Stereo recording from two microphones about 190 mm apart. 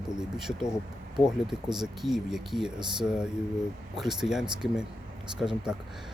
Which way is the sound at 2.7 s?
25° right (ahead or behind).